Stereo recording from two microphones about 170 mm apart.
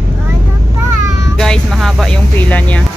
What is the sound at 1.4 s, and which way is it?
Music, centre (ahead or behind).